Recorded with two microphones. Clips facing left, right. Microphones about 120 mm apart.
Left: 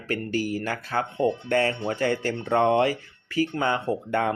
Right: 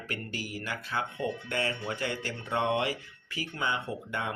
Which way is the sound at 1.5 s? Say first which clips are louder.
Left 9 dB; 40° left (ahead or behind).